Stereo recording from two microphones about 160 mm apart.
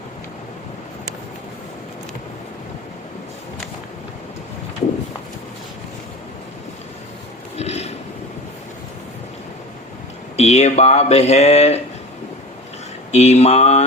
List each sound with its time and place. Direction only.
7.6 s a sound: 40° left (ahead or behind)
10.3 s speech: 40° left (ahead or behind)
13.1 s speech: 45° left (ahead or behind)